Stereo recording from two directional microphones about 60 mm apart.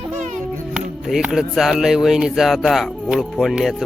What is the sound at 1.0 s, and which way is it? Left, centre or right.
Speech, centre.